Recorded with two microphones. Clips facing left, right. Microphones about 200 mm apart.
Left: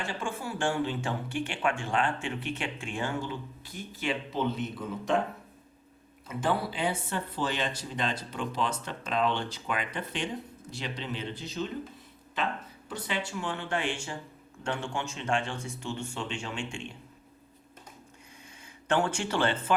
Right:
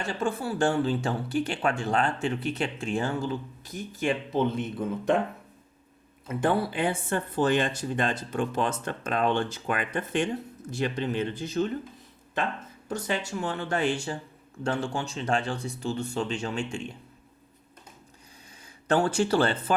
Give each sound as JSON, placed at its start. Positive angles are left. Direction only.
{"t": 0.0, "sound": "speech", "side_deg": -40}
{"t": 6.2, "sound": "speech", "side_deg": -55}
{"t": 12.9, "sound": "speech", "side_deg": -45}
{"t": 18.9, "sound": "speech", "side_deg": -35}